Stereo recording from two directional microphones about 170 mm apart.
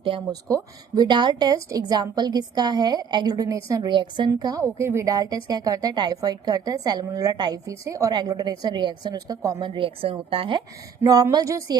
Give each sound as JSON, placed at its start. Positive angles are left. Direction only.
{"t": 0.0, "sound": "a woman's voice", "side_deg": -30}
{"t": 11.0, "sound": "a woman's voice", "side_deg": -20}